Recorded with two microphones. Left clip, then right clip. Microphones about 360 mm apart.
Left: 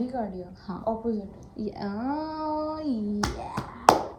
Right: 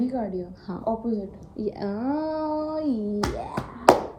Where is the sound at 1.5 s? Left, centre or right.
Centre.